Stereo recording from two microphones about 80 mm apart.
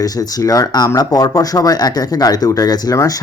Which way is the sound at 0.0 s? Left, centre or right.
Left.